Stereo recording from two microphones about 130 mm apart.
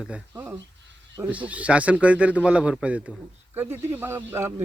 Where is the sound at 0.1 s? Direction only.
15° right (ahead or behind).